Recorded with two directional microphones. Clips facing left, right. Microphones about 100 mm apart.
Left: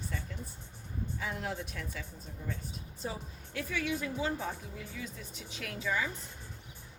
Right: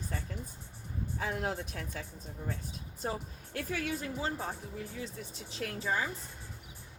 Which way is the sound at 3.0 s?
55° right (ahead or behind).